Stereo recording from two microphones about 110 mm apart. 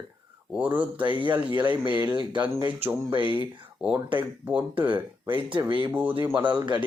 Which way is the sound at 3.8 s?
60° right (ahead or behind).